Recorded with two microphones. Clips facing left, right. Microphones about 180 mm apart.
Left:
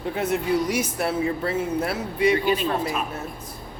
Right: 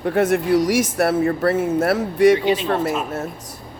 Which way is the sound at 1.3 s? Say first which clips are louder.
Right 6 dB; 55° right (ahead or behind).